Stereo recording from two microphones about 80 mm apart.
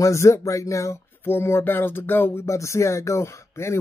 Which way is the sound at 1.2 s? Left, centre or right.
Left.